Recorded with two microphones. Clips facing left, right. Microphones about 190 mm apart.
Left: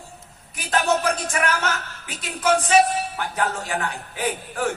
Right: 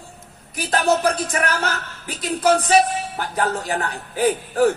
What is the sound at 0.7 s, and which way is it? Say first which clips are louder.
Speech: right 3 dB; 35° right (ahead or behind).